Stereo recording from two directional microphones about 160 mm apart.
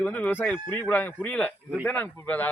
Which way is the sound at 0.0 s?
10° left (ahead or behind).